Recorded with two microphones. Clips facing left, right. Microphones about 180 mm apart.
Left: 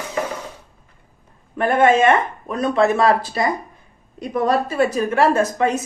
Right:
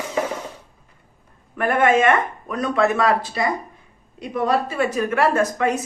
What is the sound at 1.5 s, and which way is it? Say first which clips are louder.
A woman's voice: left 2 dB; 30° left (ahead or behind).